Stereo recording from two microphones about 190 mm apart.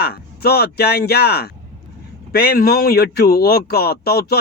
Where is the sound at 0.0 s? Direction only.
55° left (ahead or behind).